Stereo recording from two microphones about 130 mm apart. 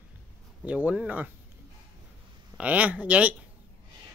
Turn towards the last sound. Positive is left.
turn(degrees=-10)  # may be behind; listen again after turning